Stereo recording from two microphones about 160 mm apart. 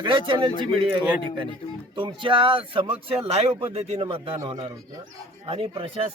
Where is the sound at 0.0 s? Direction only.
30° right (ahead or behind).